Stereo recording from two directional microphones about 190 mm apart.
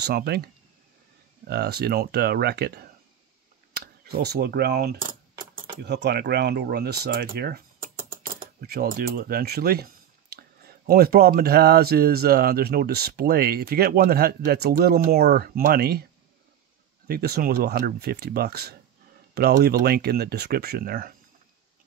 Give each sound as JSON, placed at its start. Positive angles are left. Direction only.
{"t": 0.0, "sound": "speech", "side_deg": -55}
{"t": 1.5, "sound": "speech", "side_deg": -60}
{"t": 4.2, "sound": "speech", "side_deg": -55}
{"t": 17.1, "sound": "speech", "side_deg": -55}